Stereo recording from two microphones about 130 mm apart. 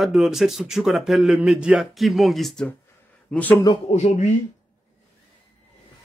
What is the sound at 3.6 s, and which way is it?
Speech, 50° left (ahead or behind).